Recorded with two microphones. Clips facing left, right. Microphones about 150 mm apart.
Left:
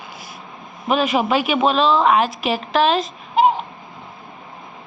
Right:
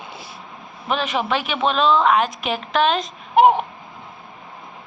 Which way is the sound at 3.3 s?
60° right (ahead or behind).